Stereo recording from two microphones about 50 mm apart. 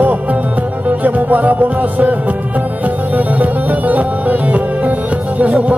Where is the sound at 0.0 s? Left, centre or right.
Right.